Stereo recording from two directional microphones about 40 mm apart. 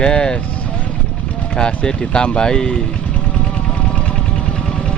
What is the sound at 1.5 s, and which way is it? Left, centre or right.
Speech, left.